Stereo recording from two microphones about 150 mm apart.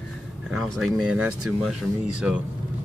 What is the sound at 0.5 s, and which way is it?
Speech, centre (ahead or behind).